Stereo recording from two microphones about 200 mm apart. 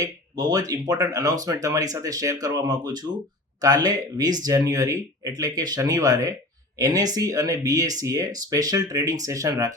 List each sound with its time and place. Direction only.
0.0 s speech: 20° right (ahead or behind)